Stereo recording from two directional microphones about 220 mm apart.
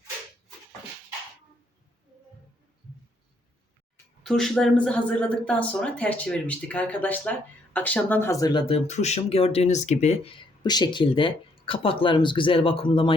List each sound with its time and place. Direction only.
4.2 s speech: centre (ahead or behind); by 10.3 s 30° left (ahead or behind)
10.6 s speech: 20° left (ahead or behind)